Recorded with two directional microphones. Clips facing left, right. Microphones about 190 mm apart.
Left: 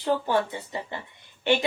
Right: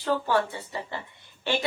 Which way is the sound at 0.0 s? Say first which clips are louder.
Left 1 dB; 20° left (ahead or behind).